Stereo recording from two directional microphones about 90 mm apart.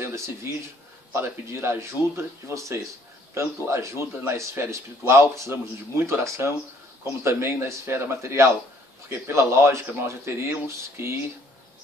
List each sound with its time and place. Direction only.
0.0 s speech: 30° right (ahead or behind)